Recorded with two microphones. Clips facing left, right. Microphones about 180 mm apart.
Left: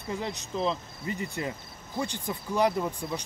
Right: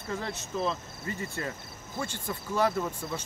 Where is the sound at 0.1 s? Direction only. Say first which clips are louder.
Left 1 dB; 15° left (ahead or behind).